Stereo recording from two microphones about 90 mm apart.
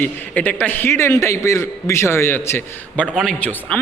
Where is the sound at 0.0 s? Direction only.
20° left (ahead or behind).